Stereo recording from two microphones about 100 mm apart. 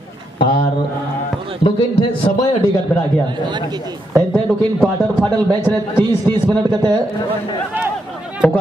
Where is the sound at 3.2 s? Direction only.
50° right (ahead or behind).